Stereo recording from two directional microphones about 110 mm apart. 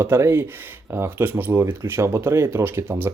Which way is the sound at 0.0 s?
25° right (ahead or behind).